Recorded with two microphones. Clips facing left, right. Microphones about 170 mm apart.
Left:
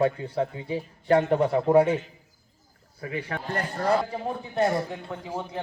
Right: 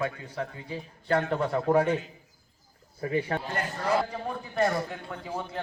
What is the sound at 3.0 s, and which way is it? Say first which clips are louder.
Speech: right 4 dB; 30° right (ahead or behind).